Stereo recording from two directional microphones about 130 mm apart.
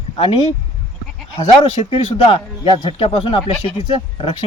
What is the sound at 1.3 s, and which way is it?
A man's voice, 40° left (ahead or behind).